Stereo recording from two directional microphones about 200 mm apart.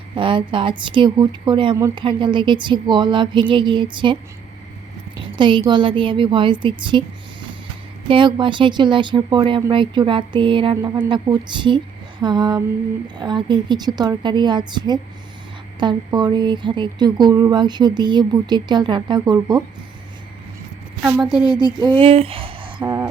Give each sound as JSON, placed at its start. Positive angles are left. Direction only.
{"t": 0.2, "sound": "speech", "side_deg": -25}
{"t": 5.4, "sound": "speech", "side_deg": -25}
{"t": 8.0, "sound": "speech", "side_deg": -25}
{"t": 21.0, "sound": "a woman's voice", "side_deg": -5}
{"t": 21.5, "sound": "speech", "side_deg": -20}